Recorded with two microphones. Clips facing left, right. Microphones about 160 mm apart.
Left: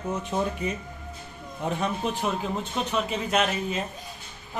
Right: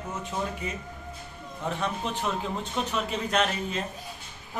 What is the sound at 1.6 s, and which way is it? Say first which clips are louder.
Speech: left 3 dB; 15° left (ahead or behind).